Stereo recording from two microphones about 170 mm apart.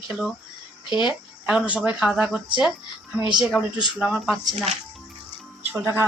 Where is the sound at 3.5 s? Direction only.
Centre (ahead or behind).